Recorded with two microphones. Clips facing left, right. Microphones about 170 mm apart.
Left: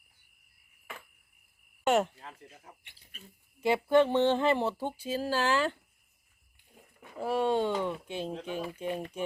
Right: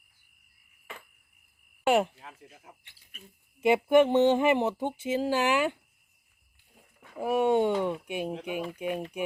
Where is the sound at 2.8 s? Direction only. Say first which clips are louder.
Left 2 dB; 20° left (ahead or behind).